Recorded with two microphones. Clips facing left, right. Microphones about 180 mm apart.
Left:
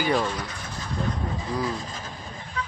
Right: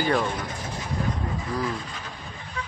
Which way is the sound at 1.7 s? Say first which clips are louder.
Left 1 dB; 40° left (ahead or behind).